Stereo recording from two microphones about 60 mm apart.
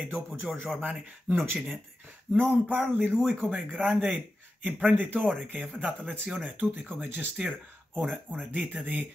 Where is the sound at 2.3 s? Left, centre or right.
Left.